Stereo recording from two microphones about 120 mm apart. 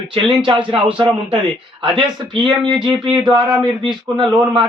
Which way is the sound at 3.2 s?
40° right (ahead or behind).